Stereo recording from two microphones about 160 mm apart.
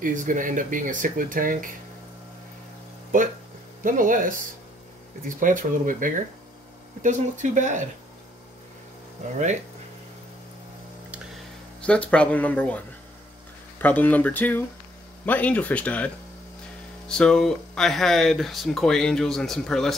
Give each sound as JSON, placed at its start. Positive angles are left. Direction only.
{"t": 0.0, "sound": "speech", "side_deg": -55}
{"t": 3.8, "sound": "speech", "side_deg": -55}
{"t": 5.4, "sound": "speech", "side_deg": -55}
{"t": 11.8, "sound": "speech", "side_deg": 5}
{"t": 17.1, "sound": "speech", "side_deg": 5}